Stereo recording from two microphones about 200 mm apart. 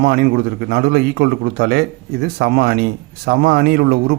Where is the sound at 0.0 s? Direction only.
50° right (ahead or behind).